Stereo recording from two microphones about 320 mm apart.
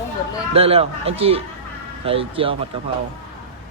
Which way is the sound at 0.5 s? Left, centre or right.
Centre.